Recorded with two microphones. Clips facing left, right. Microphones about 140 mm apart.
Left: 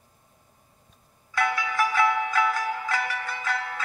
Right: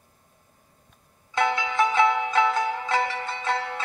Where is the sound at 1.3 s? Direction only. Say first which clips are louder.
Right 3 dB; 25° right (ahead or behind).